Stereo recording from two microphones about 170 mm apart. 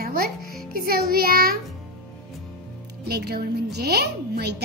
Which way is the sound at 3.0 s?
65° right (ahead or behind).